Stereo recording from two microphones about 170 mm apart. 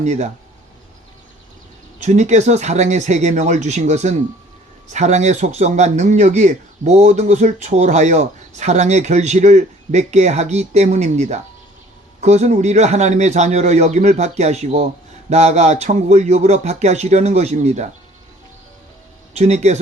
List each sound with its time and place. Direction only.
0.0 s speech: 45° right (ahead or behind)
2.0 s a man's voice: 45° right (ahead or behind)
19.3 s a man's voice: 40° right (ahead or behind)